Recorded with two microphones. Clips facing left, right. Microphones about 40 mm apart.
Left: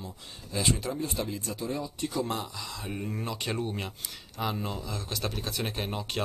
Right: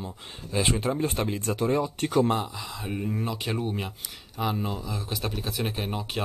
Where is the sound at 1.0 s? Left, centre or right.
Right.